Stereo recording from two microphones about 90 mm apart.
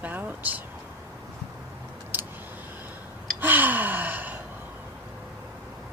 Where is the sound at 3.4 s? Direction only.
20° right (ahead or behind).